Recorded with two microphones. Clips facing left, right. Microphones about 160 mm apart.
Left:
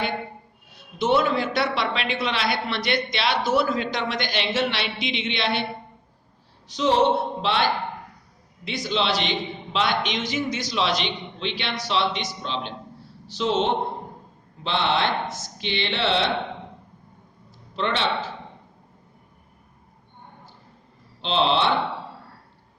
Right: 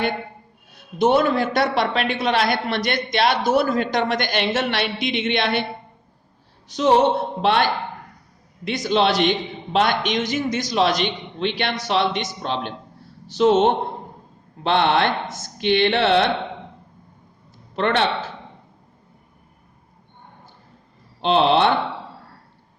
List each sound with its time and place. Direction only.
0.9 s a man's voice: 45° right (ahead or behind)
6.7 s a man's voice: 50° right (ahead or behind)
17.7 s a man's voice: 55° right (ahead or behind)
21.2 s a man's voice: 55° right (ahead or behind)